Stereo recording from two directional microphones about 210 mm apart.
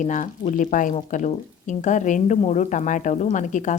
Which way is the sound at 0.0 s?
35° left (ahead or behind).